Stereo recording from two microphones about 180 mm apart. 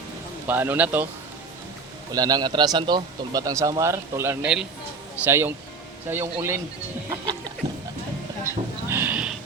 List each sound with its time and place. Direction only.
0.4 s a man's voice: 10° right (ahead or behind)
2.1 s a man's voice: 20° right (ahead or behind)
7.1 s a sound: 25° right (ahead or behind)
8.9 s a man's voice: 10° right (ahead or behind)